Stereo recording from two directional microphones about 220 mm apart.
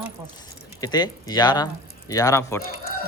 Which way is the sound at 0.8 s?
20° left (ahead or behind).